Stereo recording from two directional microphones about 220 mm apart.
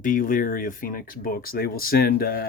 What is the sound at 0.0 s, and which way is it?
Speech, 40° left (ahead or behind).